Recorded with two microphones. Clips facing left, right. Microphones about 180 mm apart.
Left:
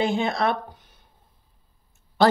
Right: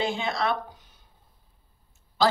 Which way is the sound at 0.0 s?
50° left (ahead or behind).